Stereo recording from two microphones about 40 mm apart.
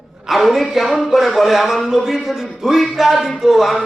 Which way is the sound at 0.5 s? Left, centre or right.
Centre.